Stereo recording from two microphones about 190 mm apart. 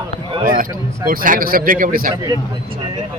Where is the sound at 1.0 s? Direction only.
45° right (ahead or behind).